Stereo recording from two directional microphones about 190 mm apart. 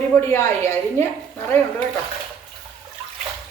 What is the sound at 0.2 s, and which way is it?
Speech, 15° left (ahead or behind).